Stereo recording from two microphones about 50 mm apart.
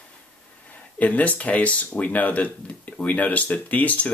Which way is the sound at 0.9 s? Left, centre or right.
Left.